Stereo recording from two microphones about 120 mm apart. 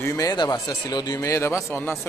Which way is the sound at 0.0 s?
25° left (ahead or behind).